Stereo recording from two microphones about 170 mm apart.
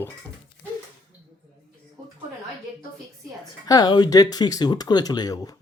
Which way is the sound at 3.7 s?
25° left (ahead or behind).